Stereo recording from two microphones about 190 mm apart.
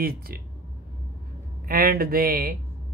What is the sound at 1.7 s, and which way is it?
Speech, 50° right (ahead or behind).